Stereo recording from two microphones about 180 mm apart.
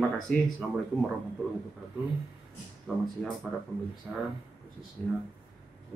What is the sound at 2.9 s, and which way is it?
Speech, centre (ahead or behind).